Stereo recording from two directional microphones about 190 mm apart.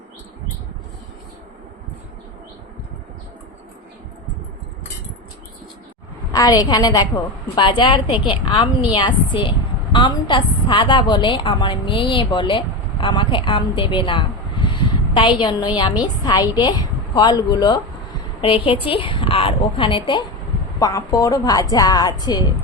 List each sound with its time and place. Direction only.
6.3 s a woman's voice: 20° left (ahead or behind)